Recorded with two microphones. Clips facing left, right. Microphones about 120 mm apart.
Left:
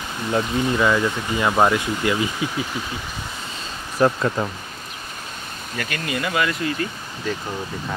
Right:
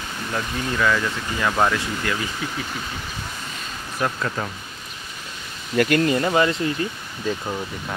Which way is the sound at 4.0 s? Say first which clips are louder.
Left 7 dB; 35° left (ahead or behind).